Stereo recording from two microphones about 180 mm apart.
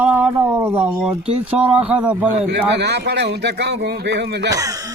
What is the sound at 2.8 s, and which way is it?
Speech, 65° right (ahead or behind).